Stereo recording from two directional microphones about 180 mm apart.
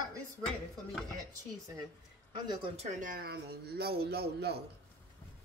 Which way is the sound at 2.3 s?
25° right (ahead or behind).